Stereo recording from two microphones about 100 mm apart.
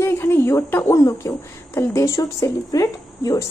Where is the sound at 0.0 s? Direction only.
25° left (ahead or behind).